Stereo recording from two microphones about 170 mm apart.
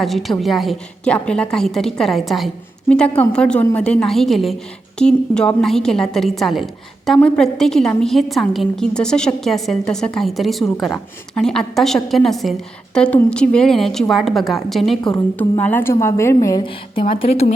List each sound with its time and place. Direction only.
0.0 s a woman's voice: centre (ahead or behind); by 17.4 s 35° left (ahead or behind)